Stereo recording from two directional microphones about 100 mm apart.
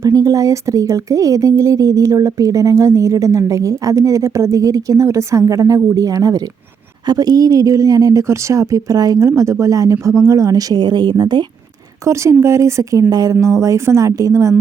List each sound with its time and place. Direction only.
0.0 s speech: 35° right (ahead or behind)
12.0 s speech: 30° right (ahead or behind)